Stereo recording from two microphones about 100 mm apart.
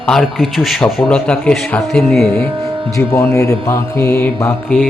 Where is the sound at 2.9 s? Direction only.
30° left (ahead or behind).